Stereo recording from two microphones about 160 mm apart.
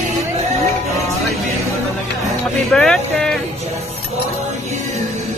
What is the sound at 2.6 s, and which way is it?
Speech, 5° left (ahead or behind).